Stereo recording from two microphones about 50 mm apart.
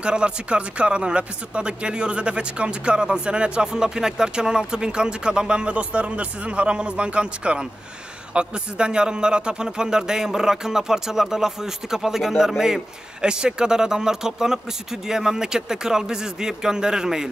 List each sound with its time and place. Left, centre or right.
0.0 s a man's voice: right